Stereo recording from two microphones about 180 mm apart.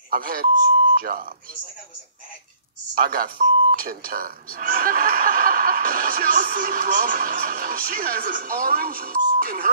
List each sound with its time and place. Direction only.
0.1 s speech: 55° right (ahead or behind)
2.9 s speech: 50° right (ahead or behind)